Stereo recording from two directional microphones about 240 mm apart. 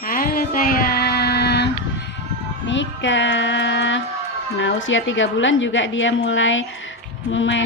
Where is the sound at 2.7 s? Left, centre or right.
Left.